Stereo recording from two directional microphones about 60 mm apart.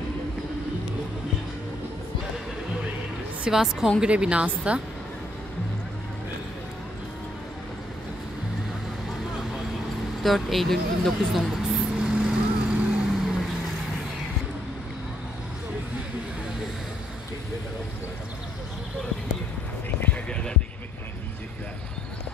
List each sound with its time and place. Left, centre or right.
3.4 s a woman's voice: centre
10.2 s speech: centre
11.9 s vehicle: centre
20.2 s a sound: centre